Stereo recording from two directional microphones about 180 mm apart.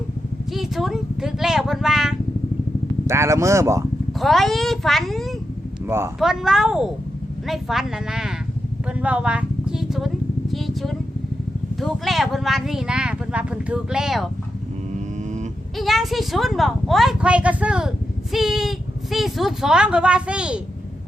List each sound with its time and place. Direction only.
0.5 s a woman's voice: centre (ahead or behind)
3.1 s speech: 15° right (ahead or behind)
4.2 s a woman's voice: centre (ahead or behind)
5.8 s speech: 15° right (ahead or behind)
6.1 s a woman's voice: 5° right (ahead or behind)
15.8 s a woman's voice: centre (ahead or behind)